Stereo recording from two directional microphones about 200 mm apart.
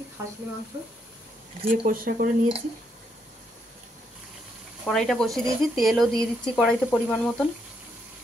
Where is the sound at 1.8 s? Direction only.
45° right (ahead or behind).